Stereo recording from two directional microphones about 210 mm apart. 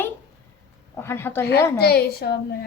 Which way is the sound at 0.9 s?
10° left (ahead or behind).